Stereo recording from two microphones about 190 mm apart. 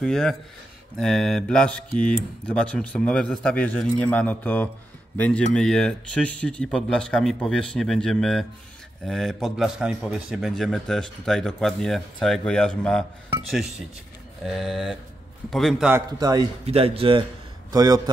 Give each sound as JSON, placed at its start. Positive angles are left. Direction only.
{"t": 0.0, "sound": "a man's voice", "side_deg": 5}
{"t": 16.2, "sound": "speech", "side_deg": -20}
{"t": 16.6, "sound": "speech", "side_deg": -30}
{"t": 17.6, "sound": "a man's voice", "side_deg": -20}